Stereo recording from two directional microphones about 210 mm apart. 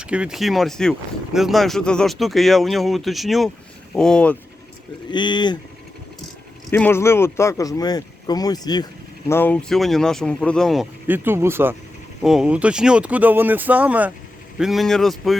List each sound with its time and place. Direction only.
0.0 s speech: 5° right (ahead or behind)
5.1 s speech: 20° left (ahead or behind)
6.7 s speech: 10° left (ahead or behind)
9.3 s speech: 10° left (ahead or behind)
11.1 s speech: 10° right (ahead or behind)